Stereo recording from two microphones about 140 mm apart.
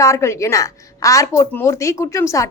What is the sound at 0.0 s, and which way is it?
A woman's voice, 20° left (ahead or behind).